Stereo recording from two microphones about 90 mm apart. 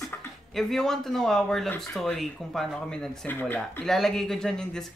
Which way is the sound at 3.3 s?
20° left (ahead or behind).